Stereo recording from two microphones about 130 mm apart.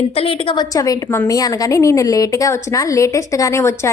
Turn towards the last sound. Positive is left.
turn(degrees=20)  # may be behind; listen again after turning